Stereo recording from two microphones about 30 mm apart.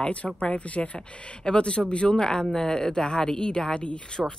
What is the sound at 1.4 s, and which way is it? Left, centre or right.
Speech, left.